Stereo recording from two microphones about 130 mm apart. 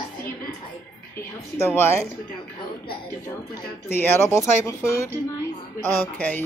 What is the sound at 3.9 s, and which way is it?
Speech, 15° left (ahead or behind).